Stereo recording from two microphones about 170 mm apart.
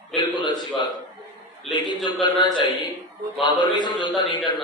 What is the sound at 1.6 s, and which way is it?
A man's voice, 25° left (ahead or behind).